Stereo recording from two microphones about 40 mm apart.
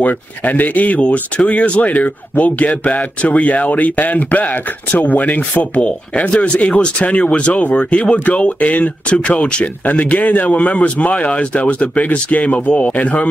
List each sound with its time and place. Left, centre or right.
0.0 s a man's voice: left